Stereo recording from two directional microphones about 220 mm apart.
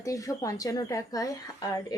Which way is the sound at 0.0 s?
15° left (ahead or behind).